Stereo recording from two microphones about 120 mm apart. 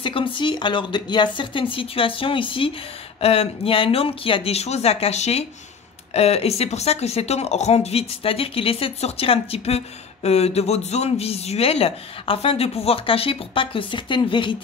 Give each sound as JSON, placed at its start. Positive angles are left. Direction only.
{"t": 0.0, "sound": "a woman's voice", "side_deg": 45}